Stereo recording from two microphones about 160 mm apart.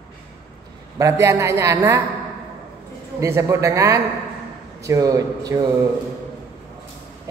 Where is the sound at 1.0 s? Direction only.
20° right (ahead or behind).